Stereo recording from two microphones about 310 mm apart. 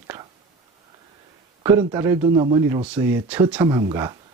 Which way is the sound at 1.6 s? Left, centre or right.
Centre.